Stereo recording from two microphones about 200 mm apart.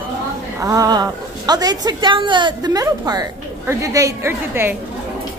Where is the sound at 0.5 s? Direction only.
15° right (ahead or behind).